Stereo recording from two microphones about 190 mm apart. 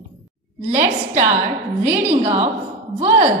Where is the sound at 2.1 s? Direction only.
35° right (ahead or behind).